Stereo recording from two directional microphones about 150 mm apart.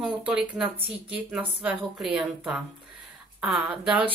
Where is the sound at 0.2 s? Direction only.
5° right (ahead or behind).